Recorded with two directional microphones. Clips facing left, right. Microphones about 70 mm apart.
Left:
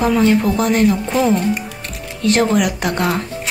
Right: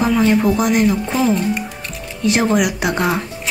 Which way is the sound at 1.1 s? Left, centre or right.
Centre.